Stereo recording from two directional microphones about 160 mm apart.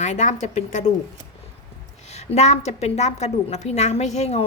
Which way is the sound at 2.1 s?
45° left (ahead or behind).